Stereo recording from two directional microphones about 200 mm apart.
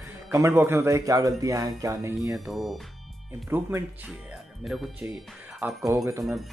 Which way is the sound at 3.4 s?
10° right (ahead or behind).